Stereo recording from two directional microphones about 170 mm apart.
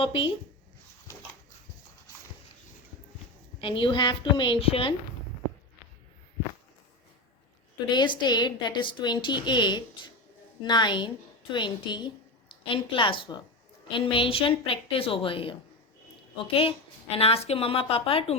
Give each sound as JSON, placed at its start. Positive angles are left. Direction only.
{"t": 0.0, "sound": "a woman's voice", "side_deg": 30}
{"t": 3.6, "sound": "a woman's voice", "side_deg": 30}
{"t": 7.9, "sound": "a woman's voice", "side_deg": 25}
{"t": 16.6, "sound": "a woman's voice", "side_deg": 35}